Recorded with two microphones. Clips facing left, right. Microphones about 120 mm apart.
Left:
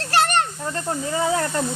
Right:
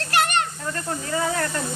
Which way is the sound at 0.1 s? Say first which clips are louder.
Left 3 dB; 35° left (ahead or behind).